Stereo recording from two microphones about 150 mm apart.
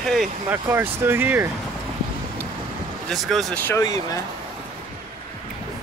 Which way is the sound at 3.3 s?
Centre (ahead or behind).